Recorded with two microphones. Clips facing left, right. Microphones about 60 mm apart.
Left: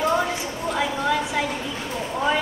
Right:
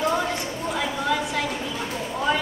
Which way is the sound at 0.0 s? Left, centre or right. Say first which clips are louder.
Left 2 dB; centre.